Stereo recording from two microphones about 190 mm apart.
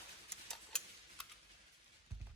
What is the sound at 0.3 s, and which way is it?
Tick-tock, 5° left (ahead or behind).